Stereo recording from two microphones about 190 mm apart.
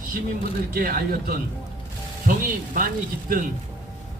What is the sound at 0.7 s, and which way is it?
Speech, 50° right (ahead or behind).